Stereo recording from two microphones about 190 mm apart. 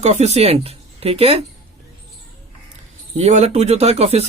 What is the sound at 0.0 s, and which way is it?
Speech, 35° right (ahead or behind).